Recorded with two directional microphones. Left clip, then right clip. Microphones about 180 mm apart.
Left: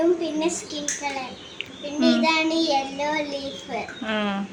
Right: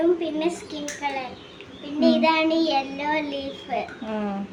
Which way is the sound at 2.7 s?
10° right (ahead or behind).